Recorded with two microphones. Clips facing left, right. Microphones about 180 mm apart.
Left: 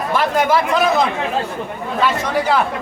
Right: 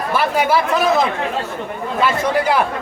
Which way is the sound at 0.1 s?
10° right (ahead or behind).